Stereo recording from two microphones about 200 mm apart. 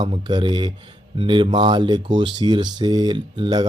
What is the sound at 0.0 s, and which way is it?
Speech, 20° right (ahead or behind).